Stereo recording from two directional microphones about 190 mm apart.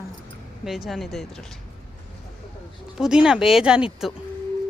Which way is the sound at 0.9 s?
Centre (ahead or behind).